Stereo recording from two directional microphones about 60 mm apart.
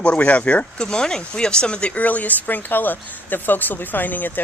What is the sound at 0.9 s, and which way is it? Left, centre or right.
Speech, centre.